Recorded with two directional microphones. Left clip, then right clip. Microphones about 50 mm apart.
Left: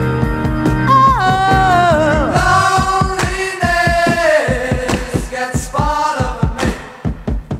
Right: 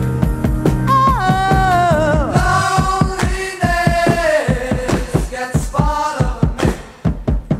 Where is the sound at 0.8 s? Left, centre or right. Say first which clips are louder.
Left 4 dB; centre.